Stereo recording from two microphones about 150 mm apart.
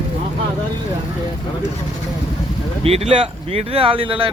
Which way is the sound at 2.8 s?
40° right (ahead or behind).